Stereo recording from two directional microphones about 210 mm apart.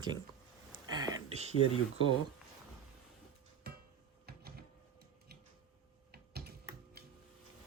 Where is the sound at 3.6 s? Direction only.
50° right (ahead or behind).